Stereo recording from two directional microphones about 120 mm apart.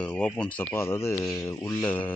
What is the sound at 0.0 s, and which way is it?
Speech, 10° left (ahead or behind).